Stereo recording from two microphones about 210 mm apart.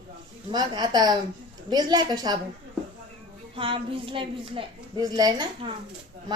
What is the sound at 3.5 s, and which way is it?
A woman's voice, 25° right (ahead or behind).